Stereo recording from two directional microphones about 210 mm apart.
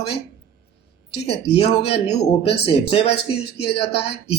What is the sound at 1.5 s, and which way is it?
A man's voice, 25° left (ahead or behind).